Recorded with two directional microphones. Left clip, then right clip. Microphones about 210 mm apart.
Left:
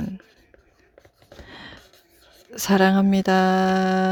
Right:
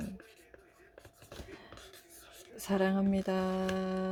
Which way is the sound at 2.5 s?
45° left (ahead or behind).